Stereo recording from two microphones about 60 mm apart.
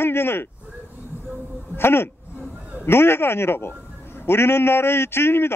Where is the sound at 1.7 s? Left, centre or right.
Left.